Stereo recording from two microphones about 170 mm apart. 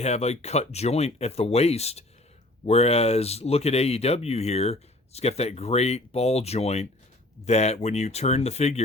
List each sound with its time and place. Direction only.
0.0 s speech: 40° left (ahead or behind)